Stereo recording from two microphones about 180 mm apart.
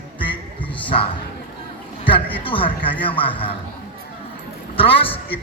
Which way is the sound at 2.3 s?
30° left (ahead or behind).